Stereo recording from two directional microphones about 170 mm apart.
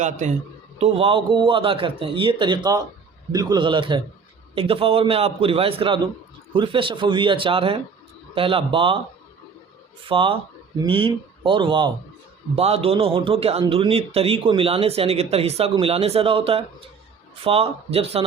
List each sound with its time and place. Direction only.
0.0 s speech: 45° right (ahead or behind)
10.1 s speech: 30° right (ahead or behind)